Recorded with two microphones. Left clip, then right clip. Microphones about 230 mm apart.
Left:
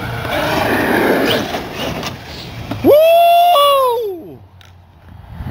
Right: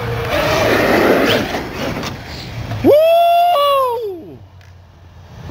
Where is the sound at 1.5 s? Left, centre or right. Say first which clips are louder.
Even; left.